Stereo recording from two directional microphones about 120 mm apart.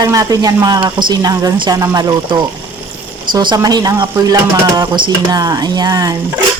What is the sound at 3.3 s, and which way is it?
Speech, 40° right (ahead or behind).